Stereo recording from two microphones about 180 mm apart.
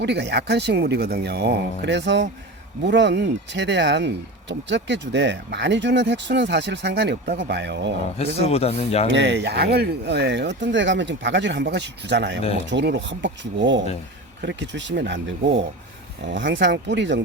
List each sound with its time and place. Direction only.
0.0 s speech: 70° right (ahead or behind)
8.2 s speech: 35° left (ahead or behind)
9.0 s speech: 75° right (ahead or behind); by 13.8 s 90° right
14.4 s speech: 75° right (ahead or behind)